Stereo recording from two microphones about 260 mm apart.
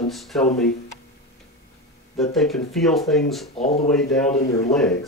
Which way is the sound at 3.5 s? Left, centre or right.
Left.